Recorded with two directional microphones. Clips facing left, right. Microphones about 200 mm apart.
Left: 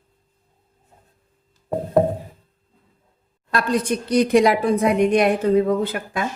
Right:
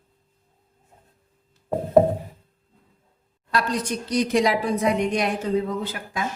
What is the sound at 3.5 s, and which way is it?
A woman's voice, 55° left (ahead or behind).